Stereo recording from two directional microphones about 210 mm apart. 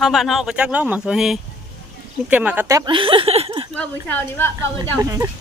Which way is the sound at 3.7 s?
10° left (ahead or behind).